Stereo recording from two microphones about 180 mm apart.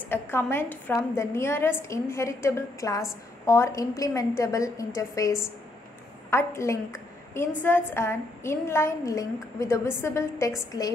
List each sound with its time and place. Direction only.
0.1 s a woman's voice: 15° left (ahead or behind)